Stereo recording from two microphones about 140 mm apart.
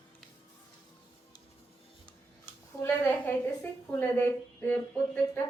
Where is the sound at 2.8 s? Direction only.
15° left (ahead or behind).